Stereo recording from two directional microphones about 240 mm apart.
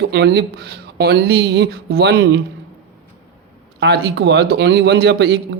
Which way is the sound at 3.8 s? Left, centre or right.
Right.